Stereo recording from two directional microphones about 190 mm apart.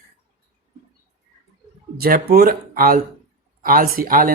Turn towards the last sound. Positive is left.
turn(degrees=-50)  # may be behind; listen again after turning